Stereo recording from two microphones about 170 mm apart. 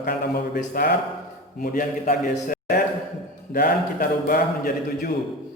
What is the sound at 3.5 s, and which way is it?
Speech, 60° left (ahead or behind).